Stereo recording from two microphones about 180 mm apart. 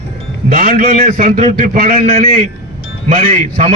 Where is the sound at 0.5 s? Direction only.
50° right (ahead or behind).